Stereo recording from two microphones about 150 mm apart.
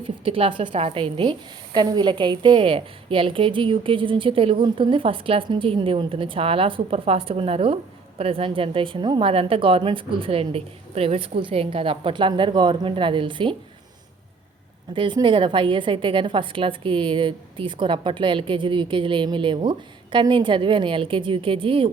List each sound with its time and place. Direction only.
0.0 s a woman's voice: 40° right (ahead or behind)
14.9 s a woman's voice: 35° right (ahead or behind)